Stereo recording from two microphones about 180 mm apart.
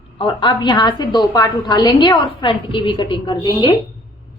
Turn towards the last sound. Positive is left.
turn(degrees=25)  # may be behind; listen again after turning